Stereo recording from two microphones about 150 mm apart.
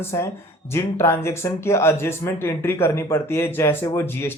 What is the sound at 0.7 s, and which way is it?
Speech, 15° left (ahead or behind).